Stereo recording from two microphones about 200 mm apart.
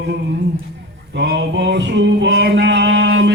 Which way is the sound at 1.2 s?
60° right (ahead or behind).